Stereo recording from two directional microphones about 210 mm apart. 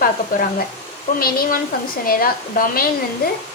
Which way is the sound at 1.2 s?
45° left (ahead or behind).